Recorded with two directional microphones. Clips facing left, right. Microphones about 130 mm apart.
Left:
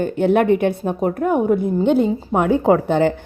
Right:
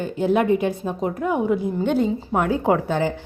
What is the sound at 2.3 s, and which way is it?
Speech, 40° left (ahead or behind).